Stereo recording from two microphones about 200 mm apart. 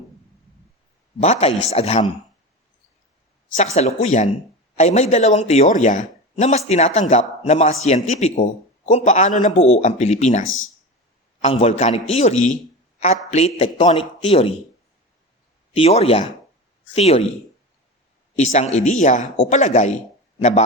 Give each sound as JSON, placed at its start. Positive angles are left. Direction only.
{"t": 1.2, "sound": "speech", "side_deg": 35}
{"t": 3.8, "sound": "speech", "side_deg": 35}
{"t": 11.4, "sound": "speech", "side_deg": 30}
{"t": 15.7, "sound": "speech", "side_deg": 30}
{"t": 18.3, "sound": "speech", "side_deg": 35}